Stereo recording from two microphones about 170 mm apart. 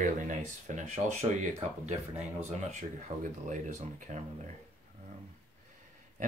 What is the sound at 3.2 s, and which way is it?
Speech, 50° right (ahead or behind).